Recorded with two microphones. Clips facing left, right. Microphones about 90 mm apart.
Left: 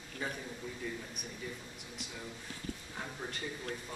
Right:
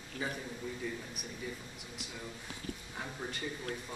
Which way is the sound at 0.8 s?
Centre (ahead or behind).